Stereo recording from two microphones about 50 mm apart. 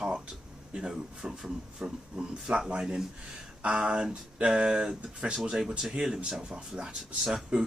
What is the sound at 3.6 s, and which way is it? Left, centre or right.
Speech, right.